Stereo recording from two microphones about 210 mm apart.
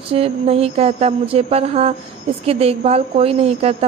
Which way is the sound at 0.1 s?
30° right (ahead or behind).